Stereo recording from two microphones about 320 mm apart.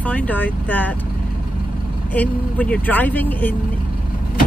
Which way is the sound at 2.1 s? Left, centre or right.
Centre.